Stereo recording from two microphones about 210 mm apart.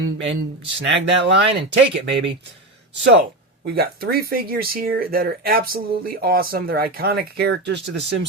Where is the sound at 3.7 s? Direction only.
45° right (ahead or behind).